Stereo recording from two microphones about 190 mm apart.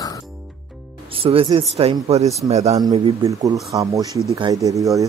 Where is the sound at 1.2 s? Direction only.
30° right (ahead or behind).